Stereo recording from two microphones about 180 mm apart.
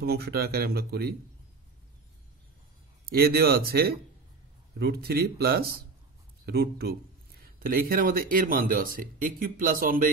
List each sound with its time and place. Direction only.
0.0 s speech: 60° right (ahead or behind)
3.1 s speech: 60° right (ahead or behind)